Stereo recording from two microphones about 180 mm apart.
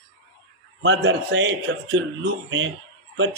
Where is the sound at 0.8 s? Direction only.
80° right.